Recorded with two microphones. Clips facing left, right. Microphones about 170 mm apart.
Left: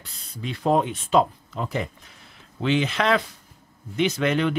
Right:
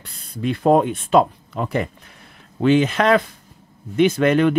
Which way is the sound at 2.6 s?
50° right (ahead or behind).